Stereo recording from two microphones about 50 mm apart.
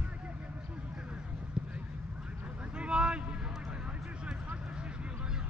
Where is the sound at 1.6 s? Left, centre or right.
Centre.